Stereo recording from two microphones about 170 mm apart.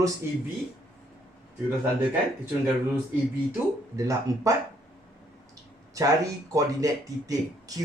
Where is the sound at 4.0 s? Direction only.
20° right (ahead or behind).